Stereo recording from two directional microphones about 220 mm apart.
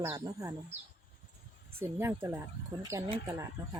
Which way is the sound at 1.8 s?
10° right (ahead or behind).